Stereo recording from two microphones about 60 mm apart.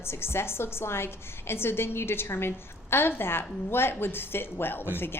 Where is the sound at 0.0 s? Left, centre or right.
Left.